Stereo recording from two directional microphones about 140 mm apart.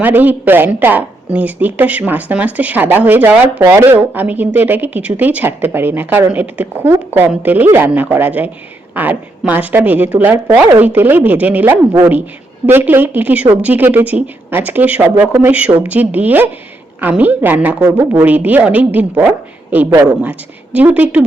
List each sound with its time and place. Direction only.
0.0 s speech: 10° right (ahead or behind)
17.8 s speech: 25° right (ahead or behind)
18.1 s speech: 10° right (ahead or behind)